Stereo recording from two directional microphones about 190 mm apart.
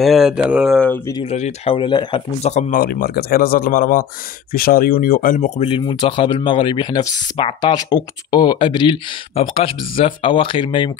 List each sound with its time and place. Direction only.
0.0 s speech: centre (ahead or behind)
1.3 s speech: 35° left (ahead or behind)
2.5 s a man's voice: 50° left (ahead or behind); by 10.9 s 25° left (ahead or behind)